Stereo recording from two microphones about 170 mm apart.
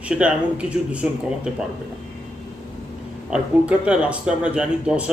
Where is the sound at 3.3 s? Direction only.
5° right (ahead or behind).